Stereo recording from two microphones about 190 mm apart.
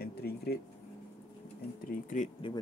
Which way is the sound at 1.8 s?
40° left (ahead or behind).